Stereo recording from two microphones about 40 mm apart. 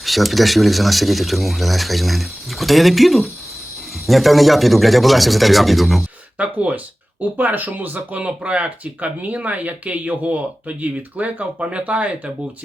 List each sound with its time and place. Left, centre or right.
0.0 s speech: centre
6.3 s speech: right